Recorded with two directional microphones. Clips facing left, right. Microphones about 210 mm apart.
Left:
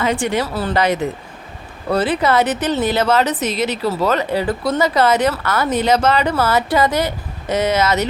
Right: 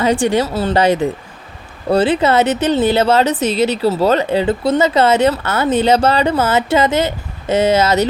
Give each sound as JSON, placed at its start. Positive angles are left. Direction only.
{"t": 0.0, "sound": "speech", "side_deg": -30}